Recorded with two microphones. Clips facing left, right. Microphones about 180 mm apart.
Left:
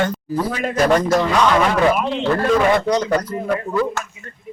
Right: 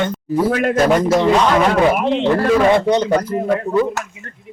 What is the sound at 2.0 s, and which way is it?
A man's voice, 20° right (ahead or behind).